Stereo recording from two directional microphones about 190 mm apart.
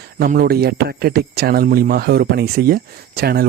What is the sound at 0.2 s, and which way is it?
Speech, 50° right (ahead or behind).